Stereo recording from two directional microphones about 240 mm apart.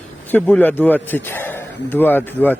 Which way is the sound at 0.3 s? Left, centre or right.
Centre.